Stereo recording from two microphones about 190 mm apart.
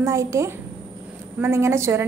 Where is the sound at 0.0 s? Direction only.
15° right (ahead or behind).